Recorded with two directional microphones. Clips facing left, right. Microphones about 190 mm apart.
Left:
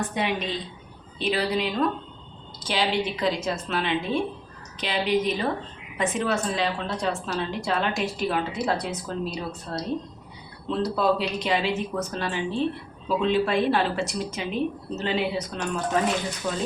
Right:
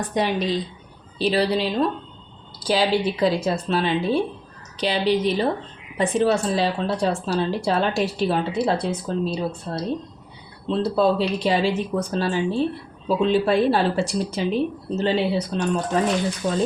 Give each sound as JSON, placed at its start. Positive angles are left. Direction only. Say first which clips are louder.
{"t": 0.1, "sound": "a woman's voice", "louder": "right 5 dB", "side_deg": -35}